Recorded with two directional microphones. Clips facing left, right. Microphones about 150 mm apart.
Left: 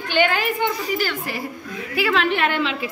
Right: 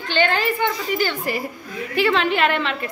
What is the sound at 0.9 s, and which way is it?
A woman's voice, centre (ahead or behind).